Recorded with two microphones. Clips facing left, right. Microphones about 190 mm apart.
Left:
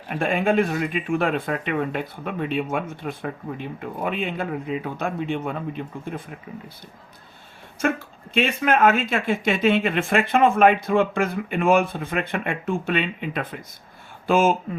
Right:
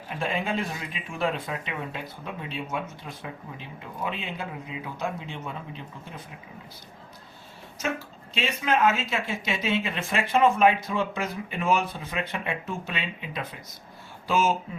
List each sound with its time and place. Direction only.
0.1 s speech: 55° left (ahead or behind)
7.8 s speech: 55° left (ahead or behind)